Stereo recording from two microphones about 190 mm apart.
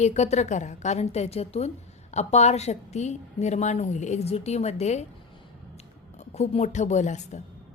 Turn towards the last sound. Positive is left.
turn(degrees=40)  # may be behind; listen again after turning